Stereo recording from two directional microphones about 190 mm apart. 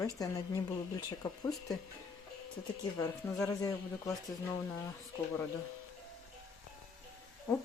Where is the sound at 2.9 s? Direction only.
15° left (ahead or behind).